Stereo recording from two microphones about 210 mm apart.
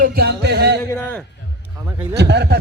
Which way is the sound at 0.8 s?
10° left (ahead or behind).